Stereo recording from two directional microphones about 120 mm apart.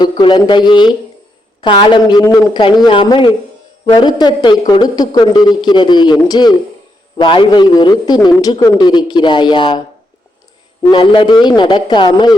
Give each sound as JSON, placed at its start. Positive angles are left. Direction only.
{"t": 0.0, "sound": "a man's voice", "side_deg": 40}
{"t": 10.8, "sound": "a man's voice", "side_deg": 45}